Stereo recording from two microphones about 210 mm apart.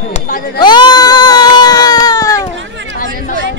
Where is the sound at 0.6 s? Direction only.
20° left (ahead or behind).